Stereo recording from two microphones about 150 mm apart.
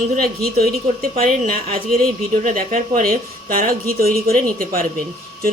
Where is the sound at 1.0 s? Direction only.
75° right (ahead or behind).